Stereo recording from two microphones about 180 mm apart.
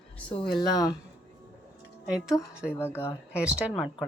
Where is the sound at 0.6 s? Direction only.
20° left (ahead or behind).